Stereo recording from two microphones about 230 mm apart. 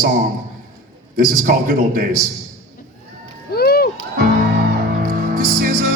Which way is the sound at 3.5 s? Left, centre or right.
Left.